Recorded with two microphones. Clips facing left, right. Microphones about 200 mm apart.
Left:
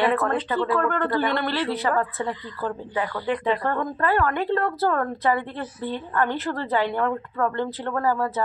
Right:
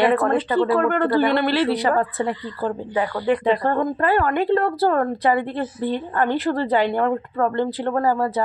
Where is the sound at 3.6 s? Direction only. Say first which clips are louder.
Right 5 dB; 30° right (ahead or behind).